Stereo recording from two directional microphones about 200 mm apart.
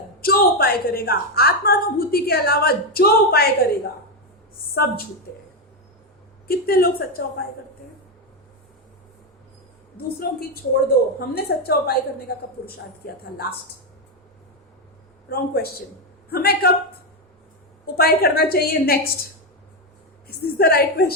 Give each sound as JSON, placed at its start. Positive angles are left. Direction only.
{"t": 0.2, "sound": "a woman's voice", "side_deg": 50}
{"t": 6.5, "sound": "a woman's voice", "side_deg": 50}
{"t": 11.3, "sound": "a woman's voice", "side_deg": 50}
{"t": 15.3, "sound": "a woman's voice", "side_deg": 50}
{"t": 17.9, "sound": "a woman's voice", "side_deg": 50}